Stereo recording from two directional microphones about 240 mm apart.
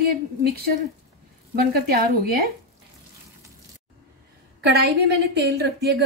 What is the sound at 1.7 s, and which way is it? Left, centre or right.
Speech, right.